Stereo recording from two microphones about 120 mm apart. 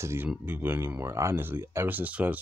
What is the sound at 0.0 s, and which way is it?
Speech, 20° right (ahead or behind).